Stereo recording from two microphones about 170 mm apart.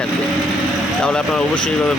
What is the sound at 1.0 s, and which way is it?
Speech, 5° left (ahead or behind).